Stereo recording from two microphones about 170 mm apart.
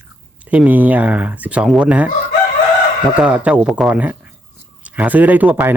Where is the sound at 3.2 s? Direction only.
5° right (ahead or behind).